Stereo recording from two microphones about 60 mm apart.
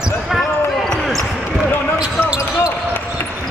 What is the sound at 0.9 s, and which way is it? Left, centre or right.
Basketball bounce, centre.